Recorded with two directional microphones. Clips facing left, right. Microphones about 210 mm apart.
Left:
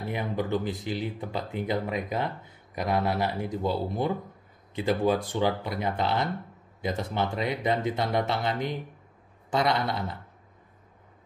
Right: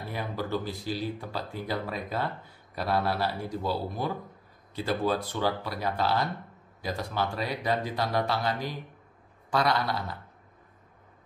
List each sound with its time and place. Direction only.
0.1 s speech: 20° left (ahead or behind)